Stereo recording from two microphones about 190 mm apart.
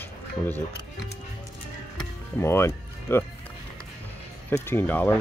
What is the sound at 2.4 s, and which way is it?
Speech, 15° left (ahead or behind).